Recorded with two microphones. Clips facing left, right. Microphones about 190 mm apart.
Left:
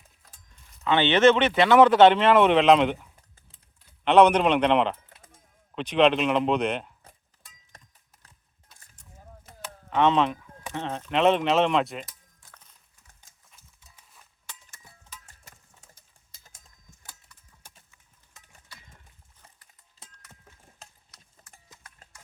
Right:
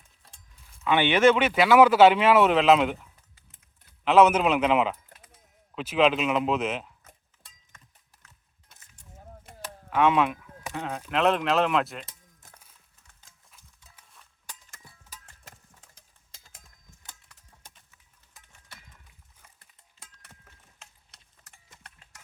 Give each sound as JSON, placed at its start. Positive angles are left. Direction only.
{"t": 0.5, "sound": "speech", "side_deg": -5}
{"t": 7.7, "sound": "a sound", "side_deg": 35}
{"t": 9.9, "sound": "speech", "side_deg": -10}
{"t": 12.5, "sound": "horse", "side_deg": -10}
{"t": 15.5, "sound": "a sound", "side_deg": -90}
{"t": 20.0, "sound": "a sound", "side_deg": 35}
{"t": 20.8, "sound": "clip-clop", "side_deg": 35}
{"t": 21.5, "sound": "clip-clop", "side_deg": -75}
{"t": 22.1, "sound": "music", "side_deg": -75}